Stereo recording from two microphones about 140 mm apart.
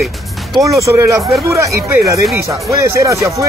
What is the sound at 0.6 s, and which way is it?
Speech, 20° right (ahead or behind).